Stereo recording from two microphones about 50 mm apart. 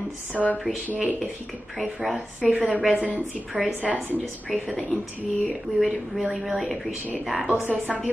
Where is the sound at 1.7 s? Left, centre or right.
Centre.